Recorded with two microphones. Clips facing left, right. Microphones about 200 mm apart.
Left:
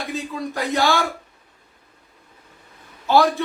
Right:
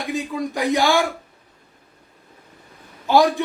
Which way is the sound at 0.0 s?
15° right (ahead or behind).